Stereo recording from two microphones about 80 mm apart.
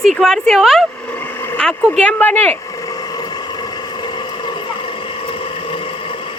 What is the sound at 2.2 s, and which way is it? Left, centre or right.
Speech, left.